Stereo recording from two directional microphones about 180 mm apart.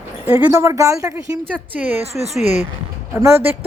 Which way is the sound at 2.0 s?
35° right (ahead or behind).